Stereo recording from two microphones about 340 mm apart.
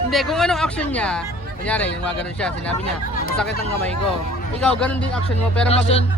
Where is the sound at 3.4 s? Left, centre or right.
Left.